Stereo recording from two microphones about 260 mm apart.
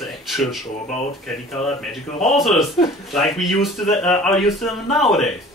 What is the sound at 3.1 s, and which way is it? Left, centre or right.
A man's voice, centre.